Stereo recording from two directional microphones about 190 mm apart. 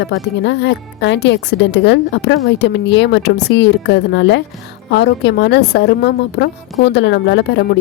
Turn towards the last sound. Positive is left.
turn(degrees=65)  # may be behind; listen again after turning